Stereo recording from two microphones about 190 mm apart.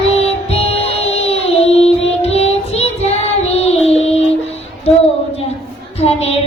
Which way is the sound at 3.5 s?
35° left (ahead or behind).